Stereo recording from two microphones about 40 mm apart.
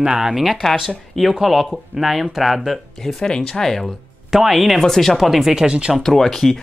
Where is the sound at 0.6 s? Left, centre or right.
Centre.